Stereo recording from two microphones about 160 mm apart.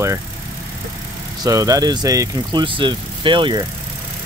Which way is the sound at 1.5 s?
20° right (ahead or behind).